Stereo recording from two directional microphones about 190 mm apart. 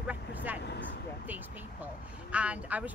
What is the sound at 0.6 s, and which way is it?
Speech, 60° left (ahead or behind).